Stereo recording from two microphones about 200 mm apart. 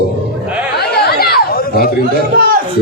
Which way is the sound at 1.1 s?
50° left (ahead or behind).